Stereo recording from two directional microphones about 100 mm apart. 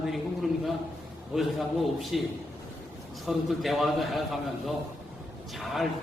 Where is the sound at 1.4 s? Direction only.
Centre (ahead or behind).